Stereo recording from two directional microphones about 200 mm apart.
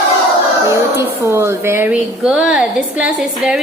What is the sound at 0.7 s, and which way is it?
A woman's voice, 15° right (ahead or behind).